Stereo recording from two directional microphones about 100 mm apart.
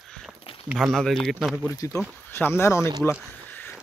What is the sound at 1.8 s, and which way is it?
Speech, 30° left (ahead or behind).